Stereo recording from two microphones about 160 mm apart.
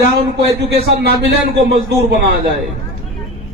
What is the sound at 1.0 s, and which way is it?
Speech, 85° right.